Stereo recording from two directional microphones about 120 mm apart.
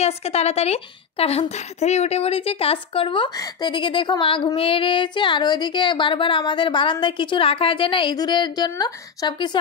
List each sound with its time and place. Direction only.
0.0 s a woman's voice: 60° left (ahead or behind); by 9.6 s 35° left (ahead or behind)